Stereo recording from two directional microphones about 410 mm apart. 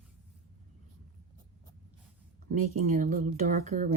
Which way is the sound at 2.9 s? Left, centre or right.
Centre.